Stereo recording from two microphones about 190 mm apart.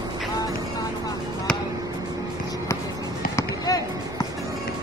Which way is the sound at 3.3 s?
20° left (ahead or behind).